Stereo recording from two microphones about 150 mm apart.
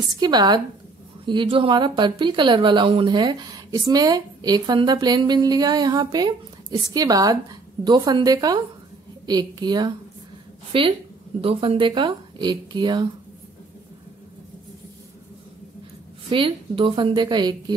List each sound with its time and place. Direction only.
0.2 s speech: 30° right (ahead or behind)
16.3 s speech: 35° right (ahead or behind)